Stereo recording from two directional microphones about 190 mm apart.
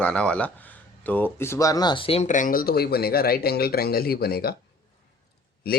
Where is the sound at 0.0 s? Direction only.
5° left (ahead or behind); by 4.5 s 55° left (ahead or behind).